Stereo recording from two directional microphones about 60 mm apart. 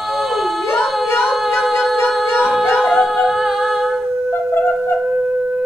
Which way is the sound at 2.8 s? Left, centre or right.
Centre.